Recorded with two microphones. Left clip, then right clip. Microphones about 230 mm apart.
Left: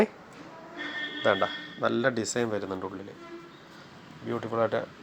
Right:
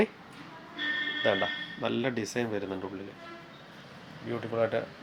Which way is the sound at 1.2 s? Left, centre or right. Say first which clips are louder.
Left 5 dB; centre.